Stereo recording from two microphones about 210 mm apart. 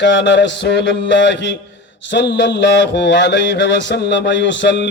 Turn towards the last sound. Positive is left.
turn(degrees=55)  # may be behind; listen again after turning